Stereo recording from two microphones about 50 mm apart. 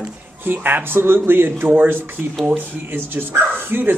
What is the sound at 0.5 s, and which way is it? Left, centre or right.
Speech, right.